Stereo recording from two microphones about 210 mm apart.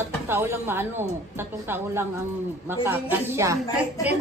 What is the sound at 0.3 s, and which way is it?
Speech, 10° right (ahead or behind).